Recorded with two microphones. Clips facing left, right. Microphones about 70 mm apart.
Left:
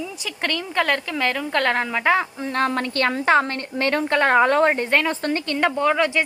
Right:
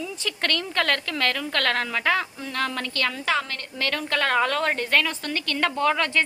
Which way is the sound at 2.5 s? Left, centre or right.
Left.